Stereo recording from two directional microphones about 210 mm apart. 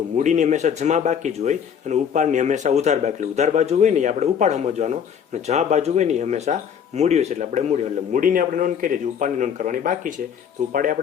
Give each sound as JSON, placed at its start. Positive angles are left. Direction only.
{"t": 0.2, "sound": "speech", "side_deg": -35}